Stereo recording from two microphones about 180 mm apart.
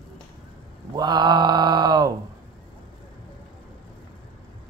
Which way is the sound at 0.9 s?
25° right (ahead or behind).